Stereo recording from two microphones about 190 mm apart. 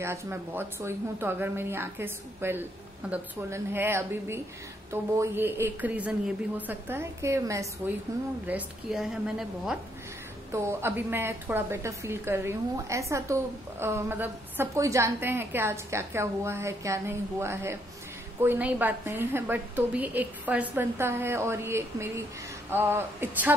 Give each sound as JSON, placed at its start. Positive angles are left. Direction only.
{"t": 0.0, "sound": "a woman's voice", "side_deg": -15}
{"t": 10.5, "sound": "a woman's voice", "side_deg": -15}